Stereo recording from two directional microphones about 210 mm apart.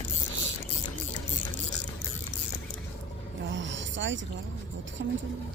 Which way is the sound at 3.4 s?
60° right (ahead or behind).